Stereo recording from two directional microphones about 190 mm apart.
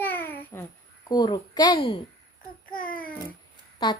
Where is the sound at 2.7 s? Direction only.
45° left (ahead or behind).